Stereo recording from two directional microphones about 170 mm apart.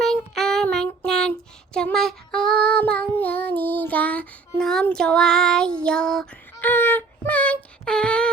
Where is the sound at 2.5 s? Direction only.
65° right (ahead or behind).